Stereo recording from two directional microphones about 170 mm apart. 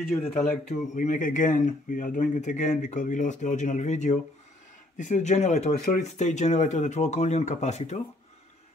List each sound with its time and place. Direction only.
0.7 s speech: 45° left (ahead or behind)